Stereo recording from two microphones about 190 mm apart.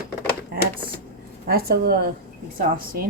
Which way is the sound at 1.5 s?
55° right (ahead or behind).